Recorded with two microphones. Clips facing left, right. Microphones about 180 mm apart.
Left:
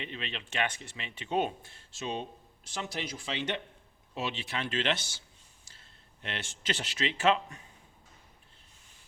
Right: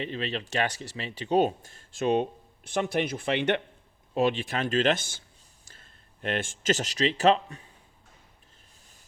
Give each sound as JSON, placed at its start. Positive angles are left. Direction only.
{"t": 0.0, "sound": "speech", "side_deg": -35}